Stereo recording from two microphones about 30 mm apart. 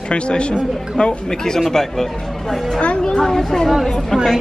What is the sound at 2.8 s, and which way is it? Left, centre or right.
Speech, left.